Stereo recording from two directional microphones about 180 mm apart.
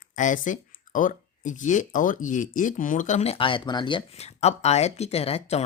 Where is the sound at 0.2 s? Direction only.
45° left (ahead or behind).